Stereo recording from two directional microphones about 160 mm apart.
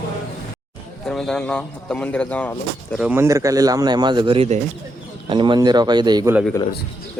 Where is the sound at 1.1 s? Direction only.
5° left (ahead or behind).